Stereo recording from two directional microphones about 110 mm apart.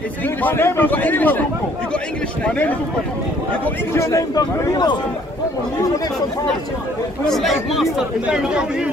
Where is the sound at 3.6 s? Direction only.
25° left (ahead or behind).